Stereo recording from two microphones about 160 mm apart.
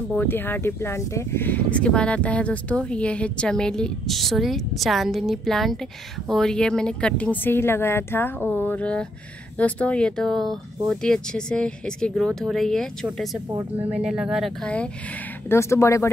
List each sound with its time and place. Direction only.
0.2 s speech: 15° left (ahead or behind)
15.5 s speech: 20° left (ahead or behind)